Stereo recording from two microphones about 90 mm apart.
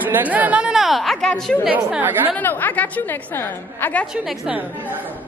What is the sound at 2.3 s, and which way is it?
A woman's voice, 20° left (ahead or behind).